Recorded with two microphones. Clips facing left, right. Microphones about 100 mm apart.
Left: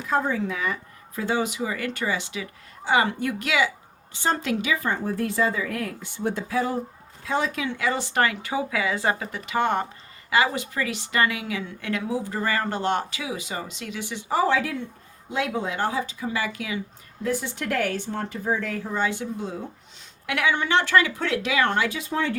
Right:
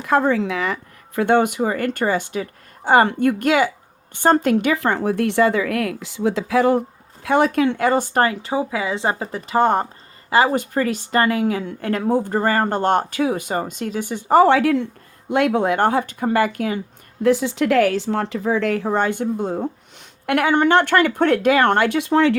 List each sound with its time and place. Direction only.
0.0 s a woman's voice: 80° right; by 16.8 s 50° right (ahead or behind)
17.2 s speech: 90° right
19.0 s a woman's voice: 50° right (ahead or behind); by 22.4 s 75° right (ahead or behind)